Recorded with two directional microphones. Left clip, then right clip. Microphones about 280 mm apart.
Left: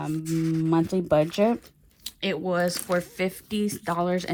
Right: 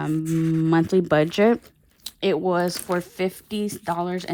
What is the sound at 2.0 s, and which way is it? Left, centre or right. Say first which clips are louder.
Speech: right 6 dB; centre.